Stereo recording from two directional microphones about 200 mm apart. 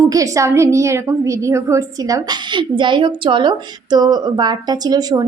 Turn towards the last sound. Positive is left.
turn(degrees=-20)  # may be behind; listen again after turning